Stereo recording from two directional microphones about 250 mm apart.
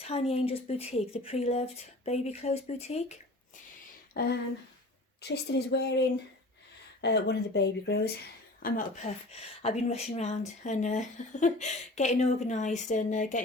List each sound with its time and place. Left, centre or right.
0.0 s speech: left
4.1 s speech: left
7.0 s speech: left
9.3 s speech: left